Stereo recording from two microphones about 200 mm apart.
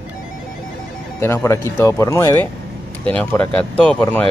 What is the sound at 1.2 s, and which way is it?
Speech, 10° left (ahead or behind).